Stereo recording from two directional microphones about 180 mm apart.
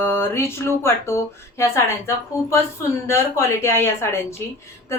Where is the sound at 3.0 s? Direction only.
15° left (ahead or behind).